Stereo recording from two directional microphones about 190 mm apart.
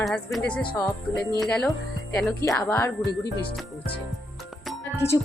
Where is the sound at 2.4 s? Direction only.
15° left (ahead or behind).